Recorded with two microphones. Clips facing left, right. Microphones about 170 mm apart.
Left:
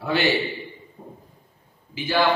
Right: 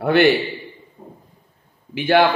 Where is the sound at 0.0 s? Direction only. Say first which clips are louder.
Right 8 dB; 60° right (ahead or behind).